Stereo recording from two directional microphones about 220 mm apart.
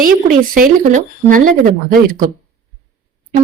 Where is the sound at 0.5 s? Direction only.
35° right (ahead or behind).